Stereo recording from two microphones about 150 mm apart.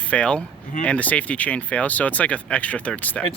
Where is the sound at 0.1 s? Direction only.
5° left (ahead or behind).